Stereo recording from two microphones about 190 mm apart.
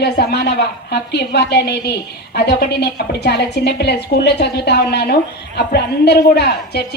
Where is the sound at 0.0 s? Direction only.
60° left (ahead or behind).